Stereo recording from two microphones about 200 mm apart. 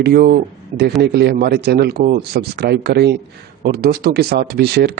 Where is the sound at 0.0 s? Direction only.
50° right (ahead or behind).